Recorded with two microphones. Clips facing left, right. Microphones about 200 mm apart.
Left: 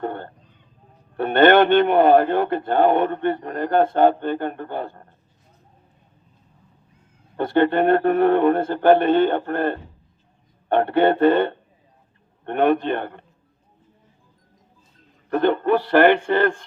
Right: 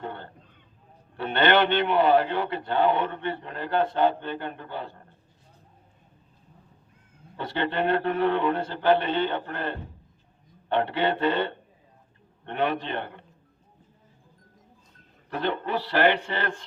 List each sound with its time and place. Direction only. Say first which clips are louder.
0.0 s a man's voice: left 8 dB; 50° left (ahead or behind)
7.3 s a man's voice: left 10 dB; 50° left (ahead or behind)
15.3 s a man's voice: left 10 dB; 50° left (ahead or behind)